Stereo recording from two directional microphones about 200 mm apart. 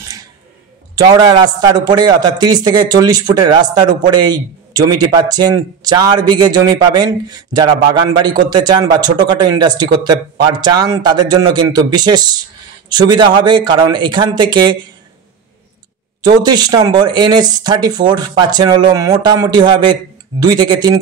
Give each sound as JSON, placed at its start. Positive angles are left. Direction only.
{"t": 0.9, "sound": "a man's voice", "side_deg": -20}
{"t": 16.3, "sound": "a man's voice", "side_deg": -20}